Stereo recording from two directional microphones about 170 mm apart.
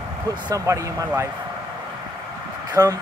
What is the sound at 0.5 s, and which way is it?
Speech, 20° right (ahead or behind).